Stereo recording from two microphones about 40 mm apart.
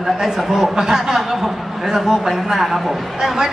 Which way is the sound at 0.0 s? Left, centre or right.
Centre.